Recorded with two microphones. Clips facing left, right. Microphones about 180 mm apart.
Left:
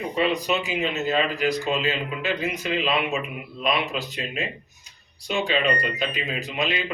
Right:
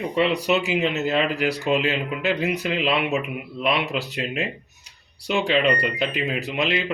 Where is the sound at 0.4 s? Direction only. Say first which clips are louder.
Right 4 dB; 70° right (ahead or behind).